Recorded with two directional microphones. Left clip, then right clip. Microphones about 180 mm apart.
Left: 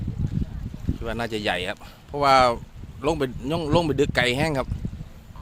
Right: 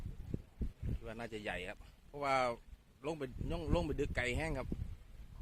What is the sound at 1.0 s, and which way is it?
Speech, 5° left (ahead or behind).